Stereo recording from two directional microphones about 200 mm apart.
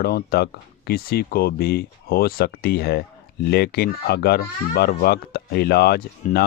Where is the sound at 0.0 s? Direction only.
50° left (ahead or behind).